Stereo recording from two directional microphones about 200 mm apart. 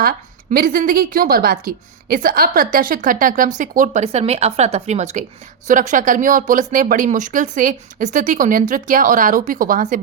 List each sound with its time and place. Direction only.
0.0 s a woman's voice: 45° right (ahead or behind)